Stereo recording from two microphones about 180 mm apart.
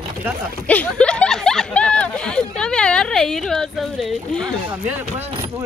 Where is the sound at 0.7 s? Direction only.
5° left (ahead or behind).